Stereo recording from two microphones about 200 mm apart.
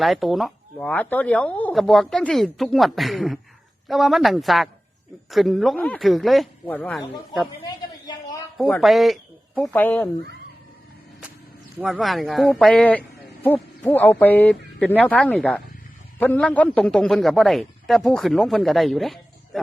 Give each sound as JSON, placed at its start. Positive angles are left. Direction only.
{"t": 0.0, "sound": "speech", "side_deg": 0}
{"t": 7.6, "sound": "a sound", "side_deg": 20}
{"t": 8.5, "sound": "speech", "side_deg": 5}
{"t": 11.8, "sound": "speech", "side_deg": 0}